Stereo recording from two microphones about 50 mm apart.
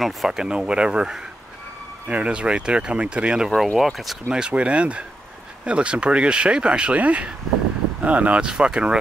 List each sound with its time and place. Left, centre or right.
0.0 s speech: centre
0.4 s speech: centre
3.4 s speech: centre
4.3 s speech: right
8.5 s speech: centre